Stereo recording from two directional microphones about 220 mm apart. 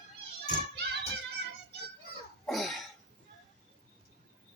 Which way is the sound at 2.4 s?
Centre (ahead or behind).